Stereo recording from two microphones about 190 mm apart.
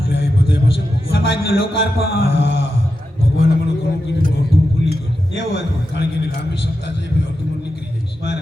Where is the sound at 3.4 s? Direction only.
55° left (ahead or behind).